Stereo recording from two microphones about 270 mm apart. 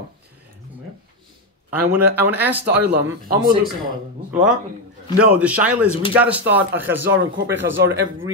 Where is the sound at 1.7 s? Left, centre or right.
Centre.